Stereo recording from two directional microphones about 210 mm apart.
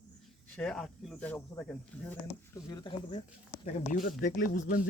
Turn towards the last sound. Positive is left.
turn(degrees=40)  # may be behind; listen again after turning